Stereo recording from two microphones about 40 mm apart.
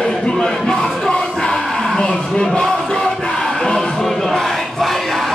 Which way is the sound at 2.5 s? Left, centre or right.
Centre.